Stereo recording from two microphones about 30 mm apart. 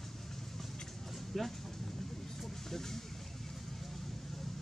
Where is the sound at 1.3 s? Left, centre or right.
Centre.